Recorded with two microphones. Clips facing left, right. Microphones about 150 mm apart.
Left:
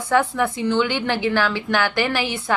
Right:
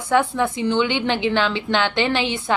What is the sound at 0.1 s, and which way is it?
A woman's voice, 20° right (ahead or behind).